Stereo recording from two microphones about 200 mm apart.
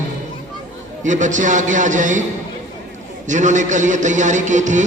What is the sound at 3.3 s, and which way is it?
A man's voice, 40° right (ahead or behind).